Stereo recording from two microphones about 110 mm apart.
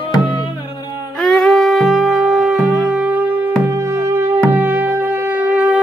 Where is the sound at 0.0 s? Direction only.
45° left (ahead or behind).